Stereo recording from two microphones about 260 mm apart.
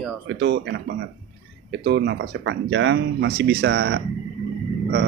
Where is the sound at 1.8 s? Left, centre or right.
Right.